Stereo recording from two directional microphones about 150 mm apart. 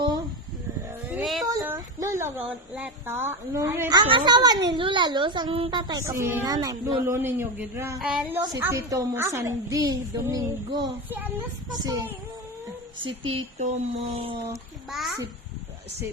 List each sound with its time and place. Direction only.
1.0 s a sound: 5° right (ahead or behind)
1.6 s a sound: 15° right (ahead or behind)
2.5 s a woman's voice: 10° right (ahead or behind)
3.9 s a child's voice: 30° right (ahead or behind)
5.9 s a woman's voice: 20° right (ahead or behind)
8.4 s a woman's voice: 20° right (ahead or behind)
11.1 s a woman's voice: 15° right (ahead or behind)
11.8 s a woman's voice: 25° right (ahead or behind)
14.8 s a child's voice: centre (ahead or behind)